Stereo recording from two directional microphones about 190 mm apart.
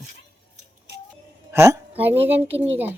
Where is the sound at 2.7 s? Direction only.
10° right (ahead or behind).